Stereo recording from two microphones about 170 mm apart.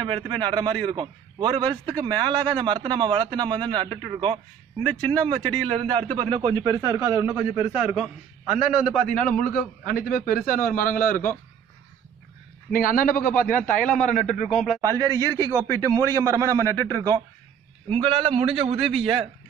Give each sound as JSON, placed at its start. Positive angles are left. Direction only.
{"t": 0.3, "sound": "a man's voice", "side_deg": -25}
{"t": 9.5, "sound": "a man's voice", "side_deg": 55}
{"t": 12.7, "sound": "a man's voice", "side_deg": 55}
{"t": 13.7, "sound": "speech", "side_deg": 5}
{"t": 14.8, "sound": "a man's voice", "side_deg": -20}